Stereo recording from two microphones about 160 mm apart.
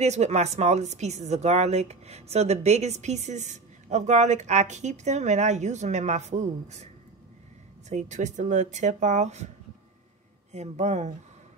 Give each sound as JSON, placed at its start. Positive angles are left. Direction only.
{"t": 0.0, "sound": "speech", "side_deg": -45}
{"t": 7.9, "sound": "speech", "side_deg": -45}
{"t": 10.5, "sound": "speech", "side_deg": -45}